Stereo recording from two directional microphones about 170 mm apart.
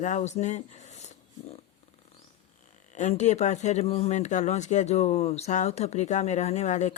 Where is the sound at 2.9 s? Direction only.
45° left (ahead or behind).